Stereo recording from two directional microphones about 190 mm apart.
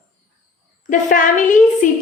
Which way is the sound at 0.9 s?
45° left (ahead or behind).